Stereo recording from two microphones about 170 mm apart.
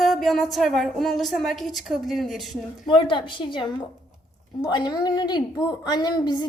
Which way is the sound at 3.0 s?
30° left (ahead or behind).